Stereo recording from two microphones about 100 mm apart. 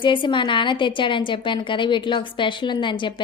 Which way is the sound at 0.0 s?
55° left (ahead or behind).